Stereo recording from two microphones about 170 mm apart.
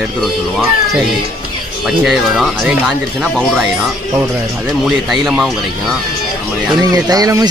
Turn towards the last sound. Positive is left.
turn(degrees=-20)  # may be behind; listen again after turning